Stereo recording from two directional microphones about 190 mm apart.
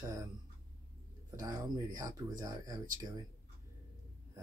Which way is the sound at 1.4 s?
15° right (ahead or behind).